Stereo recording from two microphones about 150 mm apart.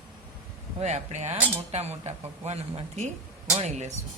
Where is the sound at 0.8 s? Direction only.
50° right (ahead or behind).